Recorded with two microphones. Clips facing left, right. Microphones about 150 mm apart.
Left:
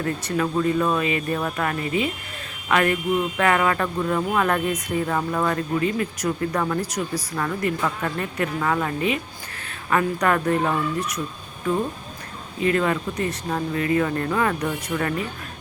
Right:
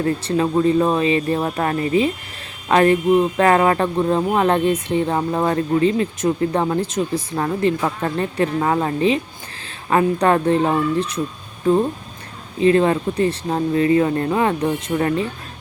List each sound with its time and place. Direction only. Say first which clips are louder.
0.0 s speech: right 5 dB; 30° right (ahead or behind)